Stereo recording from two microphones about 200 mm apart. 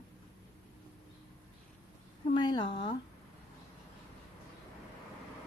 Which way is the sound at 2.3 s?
20° left (ahead or behind).